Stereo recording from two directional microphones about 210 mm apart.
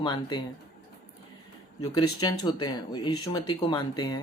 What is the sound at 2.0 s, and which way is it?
A woman's voice, 20° left (ahead or behind).